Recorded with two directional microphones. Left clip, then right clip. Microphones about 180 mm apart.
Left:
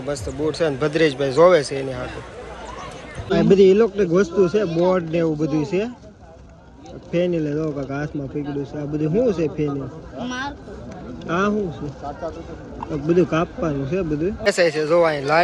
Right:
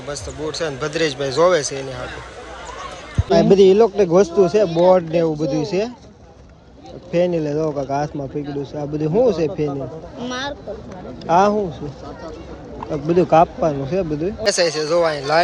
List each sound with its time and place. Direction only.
0.1 s speech: 10° right (ahead or behind)
3.2 s speech: 20° right (ahead or behind)
4.9 s speech: 20° right (ahead or behind)
7.1 s speech: 20° right (ahead or behind)
10.2 s speech: 55° right (ahead or behind)
11.3 s speech: 30° right (ahead or behind)
13.1 s speech: 25° right (ahead or behind)
14.4 s speech: 10° right (ahead or behind)